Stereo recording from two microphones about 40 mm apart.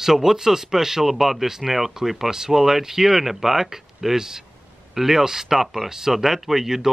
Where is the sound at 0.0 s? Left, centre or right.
Centre.